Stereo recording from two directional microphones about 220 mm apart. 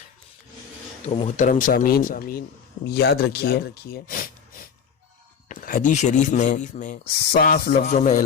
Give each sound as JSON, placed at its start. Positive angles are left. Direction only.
{"t": 1.0, "sound": "speech", "side_deg": 30}